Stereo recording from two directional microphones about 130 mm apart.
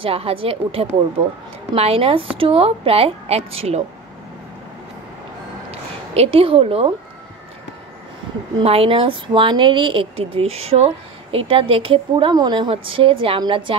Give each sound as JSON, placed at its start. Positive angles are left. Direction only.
{"t": 0.0, "sound": "a woman's voice", "side_deg": -45}
{"t": 5.7, "sound": "speech", "side_deg": -50}
{"t": 8.5, "sound": "a woman's voice", "side_deg": -45}